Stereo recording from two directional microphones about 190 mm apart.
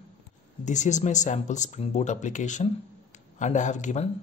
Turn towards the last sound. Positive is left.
turn(degrees=40)  # may be behind; listen again after turning